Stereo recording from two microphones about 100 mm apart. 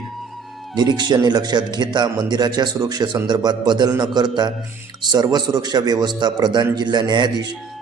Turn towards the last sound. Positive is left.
turn(degrees=-45)  # may be behind; listen again after turning